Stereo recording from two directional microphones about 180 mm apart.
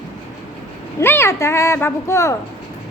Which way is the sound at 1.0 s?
15° left (ahead or behind).